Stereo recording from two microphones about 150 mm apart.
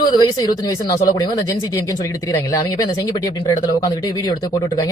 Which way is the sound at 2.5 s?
25° left (ahead or behind).